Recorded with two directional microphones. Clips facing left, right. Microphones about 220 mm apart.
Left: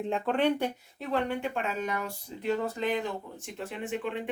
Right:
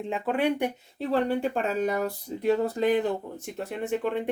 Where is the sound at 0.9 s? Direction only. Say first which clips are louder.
Right 6 dB; 35° right (ahead or behind).